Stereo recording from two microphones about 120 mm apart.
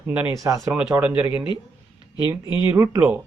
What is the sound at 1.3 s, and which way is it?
Speech, 40° left (ahead or behind).